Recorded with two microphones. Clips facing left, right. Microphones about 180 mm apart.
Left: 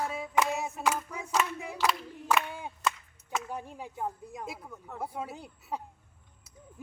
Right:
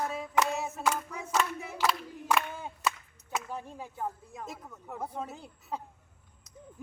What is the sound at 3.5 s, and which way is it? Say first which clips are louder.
Speech: left 1 dB; 15° left (ahead or behind).